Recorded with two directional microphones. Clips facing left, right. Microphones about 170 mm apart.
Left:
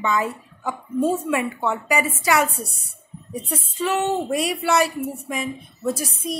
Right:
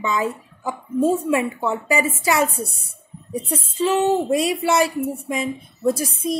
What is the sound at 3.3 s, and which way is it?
Speech, 25° right (ahead or behind).